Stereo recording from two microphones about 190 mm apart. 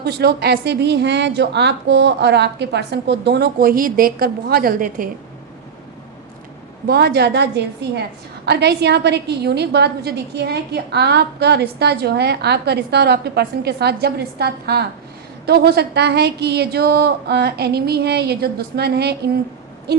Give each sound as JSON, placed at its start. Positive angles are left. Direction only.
{"t": 0.0, "sound": "a woman's voice", "side_deg": -60}
{"t": 6.8, "sound": "a woman's voice", "side_deg": -55}